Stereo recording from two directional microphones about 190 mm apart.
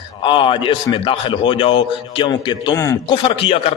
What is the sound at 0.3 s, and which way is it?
A man's voice, 25° left (ahead or behind).